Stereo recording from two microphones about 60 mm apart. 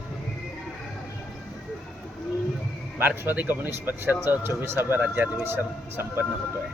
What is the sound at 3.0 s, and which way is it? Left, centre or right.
Speech, right.